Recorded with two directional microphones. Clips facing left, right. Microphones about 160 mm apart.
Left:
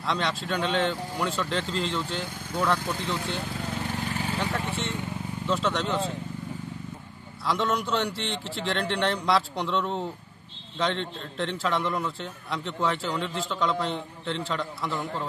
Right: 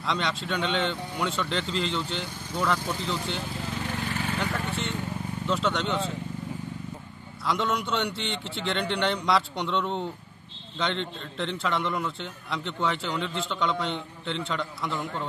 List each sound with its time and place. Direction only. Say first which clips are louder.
0.0 s a man's voice: left 1 dB; centre (ahead or behind)
4.4 s speech: left 1 dB; 25° left (ahead or behind)
5.5 s a man's voice: even; centre (ahead or behind)
7.4 s a man's voice: left 1 dB; centre (ahead or behind)